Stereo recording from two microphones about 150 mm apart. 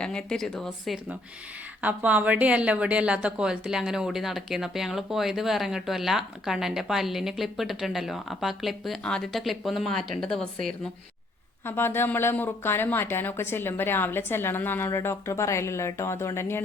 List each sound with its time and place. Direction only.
0.0 s speech: 5° left (ahead or behind)
1.8 s speech: 10° right (ahead or behind)
11.6 s speech: 15° left (ahead or behind)